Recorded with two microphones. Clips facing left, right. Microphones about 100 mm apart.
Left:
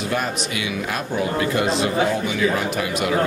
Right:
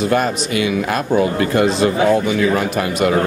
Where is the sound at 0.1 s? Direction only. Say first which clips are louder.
Right 7 dB; 50° right (ahead or behind).